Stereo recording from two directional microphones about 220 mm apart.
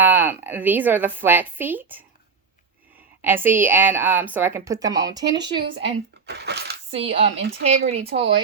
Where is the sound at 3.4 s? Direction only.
10° right (ahead or behind).